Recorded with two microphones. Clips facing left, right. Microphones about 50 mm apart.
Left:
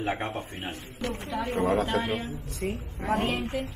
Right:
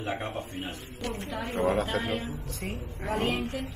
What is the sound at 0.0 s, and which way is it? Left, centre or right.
Speech, left.